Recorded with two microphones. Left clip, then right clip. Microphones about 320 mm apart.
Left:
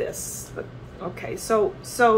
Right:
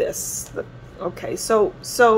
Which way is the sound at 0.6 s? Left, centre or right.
Right.